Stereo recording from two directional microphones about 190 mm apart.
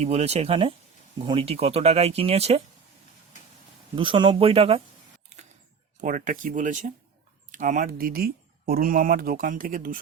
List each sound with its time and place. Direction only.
0.0 s speech: 35° right (ahead or behind)
3.9 s speech: 25° right (ahead or behind)
6.0 s speech: 45° right (ahead or behind)